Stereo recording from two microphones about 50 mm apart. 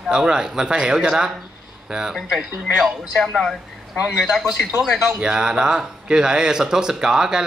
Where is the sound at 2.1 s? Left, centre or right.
Centre.